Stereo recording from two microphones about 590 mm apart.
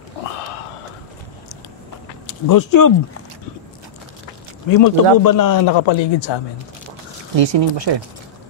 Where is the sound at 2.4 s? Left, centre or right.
Left.